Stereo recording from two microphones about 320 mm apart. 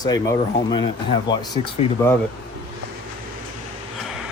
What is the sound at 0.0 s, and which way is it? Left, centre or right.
Speech, centre.